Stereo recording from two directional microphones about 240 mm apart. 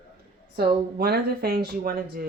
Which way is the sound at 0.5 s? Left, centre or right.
Right.